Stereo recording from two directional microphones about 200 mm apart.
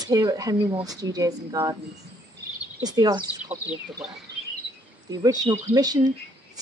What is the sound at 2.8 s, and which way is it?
Speech, 20° right (ahead or behind).